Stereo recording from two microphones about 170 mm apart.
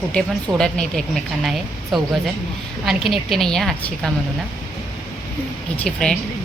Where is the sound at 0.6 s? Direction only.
Centre (ahead or behind).